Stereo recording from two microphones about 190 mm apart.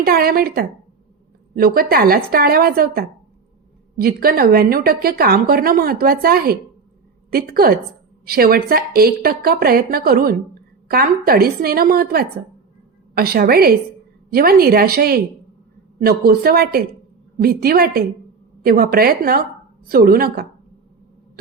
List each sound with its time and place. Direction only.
0.0 s a woman's voice: 50° right (ahead or behind)